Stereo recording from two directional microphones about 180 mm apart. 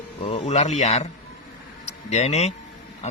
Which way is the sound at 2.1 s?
35° left (ahead or behind).